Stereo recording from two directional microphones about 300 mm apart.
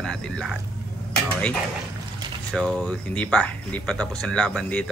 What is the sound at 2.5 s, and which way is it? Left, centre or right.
Speech, centre.